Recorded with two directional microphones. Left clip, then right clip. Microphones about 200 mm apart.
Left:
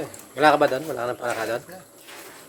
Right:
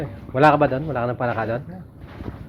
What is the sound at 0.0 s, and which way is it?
A man's voice, 15° left (ahead or behind).